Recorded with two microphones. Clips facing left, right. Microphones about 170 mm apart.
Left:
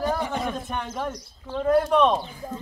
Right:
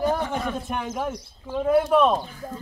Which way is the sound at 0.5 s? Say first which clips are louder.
Right 2 dB; 10° right (ahead or behind).